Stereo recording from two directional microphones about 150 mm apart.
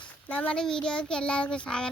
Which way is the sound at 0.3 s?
10° left (ahead or behind).